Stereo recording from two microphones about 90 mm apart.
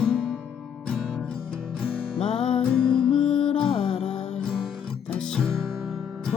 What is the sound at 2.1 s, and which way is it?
Music, 80° left.